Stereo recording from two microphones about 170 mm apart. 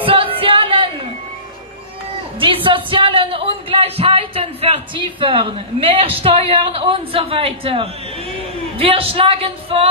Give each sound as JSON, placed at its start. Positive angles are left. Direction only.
{"t": 0.0, "sound": "music", "side_deg": -35}
{"t": 2.4, "sound": "a sound", "side_deg": -30}
{"t": 8.7, "sound": "speech", "side_deg": -35}